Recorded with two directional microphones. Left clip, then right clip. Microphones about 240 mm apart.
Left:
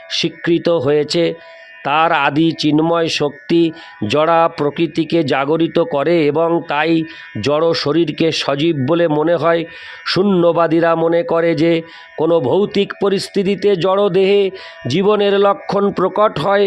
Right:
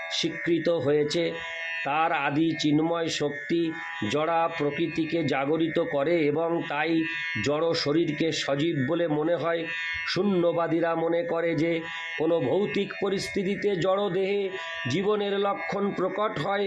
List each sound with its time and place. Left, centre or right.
0.1 s speech: left